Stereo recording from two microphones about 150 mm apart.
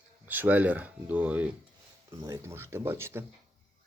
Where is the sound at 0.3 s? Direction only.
10° right (ahead or behind).